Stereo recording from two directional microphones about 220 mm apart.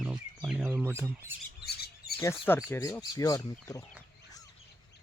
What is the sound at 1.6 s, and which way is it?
Bird, 45° left (ahead or behind).